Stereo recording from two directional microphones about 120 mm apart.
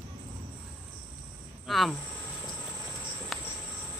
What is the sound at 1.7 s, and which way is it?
Speech, centre (ahead or behind).